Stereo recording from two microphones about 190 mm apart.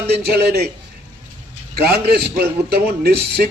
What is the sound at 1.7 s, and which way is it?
A man's voice, 60° right (ahead or behind).